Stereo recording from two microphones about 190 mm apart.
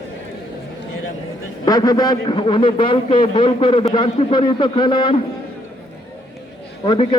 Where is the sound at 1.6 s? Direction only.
20° left (ahead or behind).